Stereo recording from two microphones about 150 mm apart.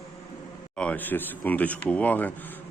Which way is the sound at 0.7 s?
10° left (ahead or behind).